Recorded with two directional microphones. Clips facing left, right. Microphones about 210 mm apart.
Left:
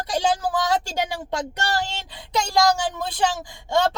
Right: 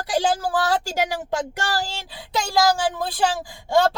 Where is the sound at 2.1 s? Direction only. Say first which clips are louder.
Even; 5° right (ahead or behind).